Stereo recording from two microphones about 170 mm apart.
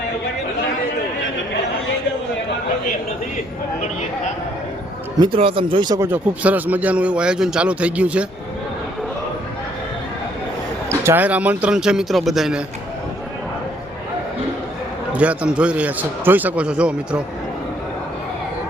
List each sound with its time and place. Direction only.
5.2 s speech: 30° right (ahead or behind)
6.1 s a man's voice: 10° right (ahead or behind)
10.8 s a man's voice: 15° right (ahead or behind)
15.1 s a man's voice: 10° right (ahead or behind)